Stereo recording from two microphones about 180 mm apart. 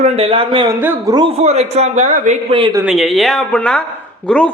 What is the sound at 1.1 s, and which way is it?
A man's voice, 30° right (ahead or behind).